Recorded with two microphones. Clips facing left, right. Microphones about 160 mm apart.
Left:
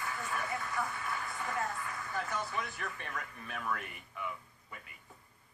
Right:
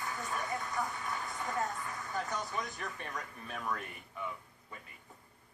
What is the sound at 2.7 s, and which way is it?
Speech, 20° right (ahead or behind).